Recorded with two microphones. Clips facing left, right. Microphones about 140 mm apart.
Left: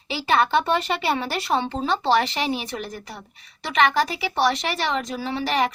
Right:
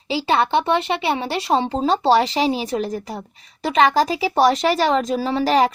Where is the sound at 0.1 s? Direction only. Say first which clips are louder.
Right 2 dB; 30° right (ahead or behind).